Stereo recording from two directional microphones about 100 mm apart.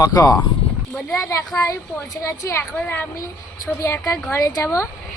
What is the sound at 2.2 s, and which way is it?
A woman's voice, 30° left (ahead or behind).